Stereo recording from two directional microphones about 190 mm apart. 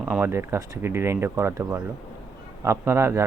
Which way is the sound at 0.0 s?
10° right (ahead or behind).